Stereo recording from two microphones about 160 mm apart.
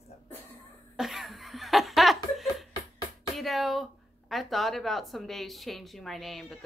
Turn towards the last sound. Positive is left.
turn(degrees=0)  # may be behind; listen again after turning